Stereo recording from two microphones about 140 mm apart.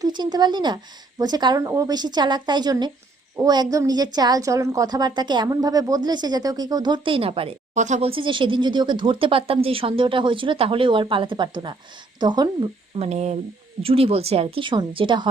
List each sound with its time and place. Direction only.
0.0 s a woman's voice: 30° right (ahead or behind)
7.7 s speech: 60° right (ahead or behind)
8.1 s speech: 35° right (ahead or behind)
13.0 s speech: 50° right (ahead or behind); by 15.3 s 35° right (ahead or behind)